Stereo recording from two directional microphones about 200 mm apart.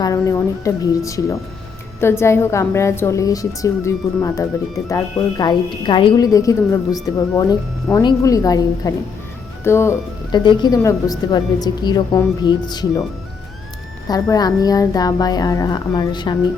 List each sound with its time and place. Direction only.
0.0 s a woman's voice: 15° left (ahead or behind)
14.1 s speech: 20° left (ahead or behind)